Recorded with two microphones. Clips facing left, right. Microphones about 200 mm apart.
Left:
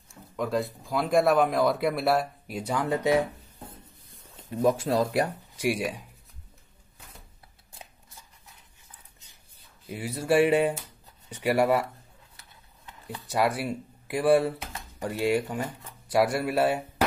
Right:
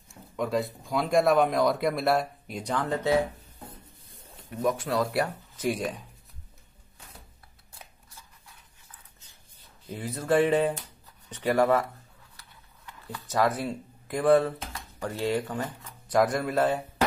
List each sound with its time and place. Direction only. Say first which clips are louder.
0.1 s speech: even; centre (ahead or behind); by 3.2 s 15° left (ahead or behind)
4.4 s speech: left 4 dB; 25° left (ahead or behind)
9.8 s speech: left 1 dB; 10° left (ahead or behind)
12.4 s a sound: even; 20° left (ahead or behind)
14.7 s speech: left 1 dB; 15° left (ahead or behind)